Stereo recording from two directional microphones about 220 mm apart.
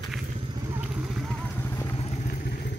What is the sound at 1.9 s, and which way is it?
Vehicle, 30° left (ahead or behind).